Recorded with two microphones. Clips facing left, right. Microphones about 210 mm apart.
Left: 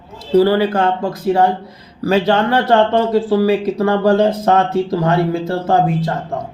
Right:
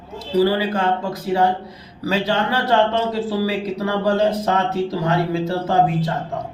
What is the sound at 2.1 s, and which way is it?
Speech, 55° left (ahead or behind).